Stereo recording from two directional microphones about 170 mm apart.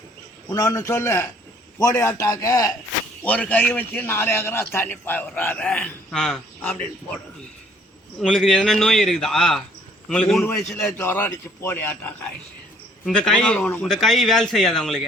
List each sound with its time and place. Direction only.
0.5 s a man's voice: 20° left (ahead or behind)
3.2 s a man's voice: 10° left (ahead or behind)
8.2 s a man's voice: centre (ahead or behind)